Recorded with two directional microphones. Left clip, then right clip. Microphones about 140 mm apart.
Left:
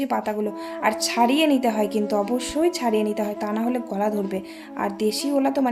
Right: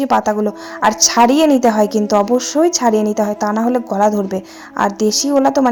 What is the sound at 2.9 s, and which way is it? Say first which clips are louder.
A woman's voice: right 8 dB; 40° right (ahead or behind).